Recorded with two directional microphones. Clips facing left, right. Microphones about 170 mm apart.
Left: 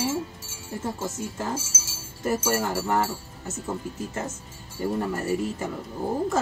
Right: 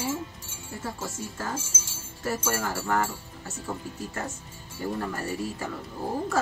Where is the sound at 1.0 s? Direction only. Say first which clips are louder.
Left 4 dB; 20° left (ahead or behind).